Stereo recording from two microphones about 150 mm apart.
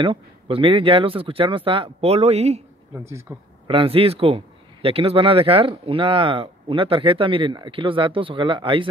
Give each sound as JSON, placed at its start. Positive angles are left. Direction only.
{"t": 0.0, "sound": "speech", "side_deg": -35}
{"t": 2.9, "sound": "speech", "side_deg": -20}
{"t": 3.6, "sound": "speech", "side_deg": -35}